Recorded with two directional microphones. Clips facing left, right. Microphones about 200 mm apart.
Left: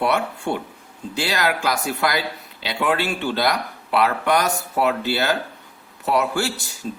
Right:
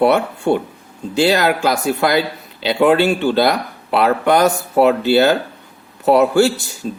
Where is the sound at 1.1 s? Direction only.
25° right (ahead or behind).